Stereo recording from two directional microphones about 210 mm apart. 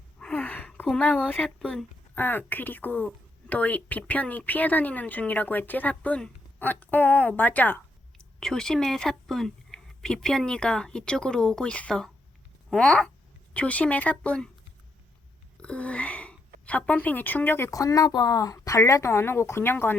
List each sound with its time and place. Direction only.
0.2 s speech: 5° left (ahead or behind)
15.6 s speech: 5° left (ahead or behind)